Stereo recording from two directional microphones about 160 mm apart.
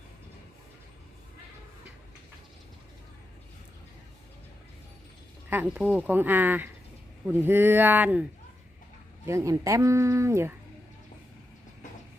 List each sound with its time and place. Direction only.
5.5 s speech: 10° right (ahead or behind)